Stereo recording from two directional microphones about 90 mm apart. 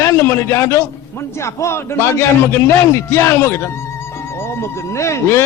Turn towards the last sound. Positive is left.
turn(degrees=30)  # may be behind; listen again after turning